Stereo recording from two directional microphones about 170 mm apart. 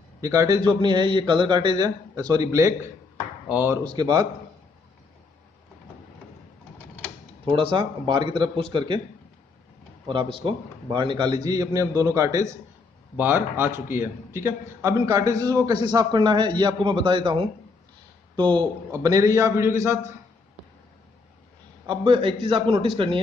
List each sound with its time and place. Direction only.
0.2 s a man's voice: 20° right (ahead or behind)
3.8 s a man's voice: 25° right (ahead or behind)
7.4 s a man's voice: 30° right (ahead or behind)
10.0 s a man's voice: 30° right (ahead or behind)
21.8 s a man's voice: 30° right (ahead or behind)